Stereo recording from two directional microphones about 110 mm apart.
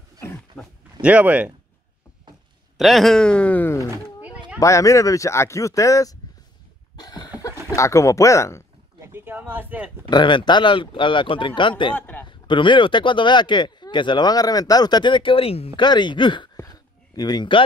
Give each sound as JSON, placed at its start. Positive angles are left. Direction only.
{"t": 0.5, "sound": "speech", "side_deg": 15}
{"t": 1.0, "sound": "speech", "side_deg": -15}
{"t": 2.8, "sound": "speech", "side_deg": 0}
{"t": 4.6, "sound": "speech", "side_deg": 30}
{"t": 7.0, "sound": "a sound", "side_deg": 40}
{"t": 7.7, "sound": "speech", "side_deg": 25}
{"t": 9.0, "sound": "speech", "side_deg": -20}
{"t": 10.0, "sound": "speech", "side_deg": 45}
{"t": 11.9, "sound": "a man's voice", "side_deg": 15}
{"t": 12.3, "sound": "speech", "side_deg": 45}
{"t": 15.8, "sound": "speech", "side_deg": 45}
{"t": 16.5, "sound": "a sound", "side_deg": 35}